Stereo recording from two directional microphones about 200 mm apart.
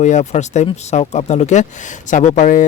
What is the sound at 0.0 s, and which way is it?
Speech, 35° left (ahead or behind).